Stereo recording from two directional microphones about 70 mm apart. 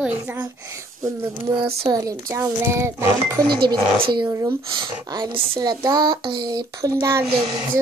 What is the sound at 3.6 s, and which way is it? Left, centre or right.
Speech, right.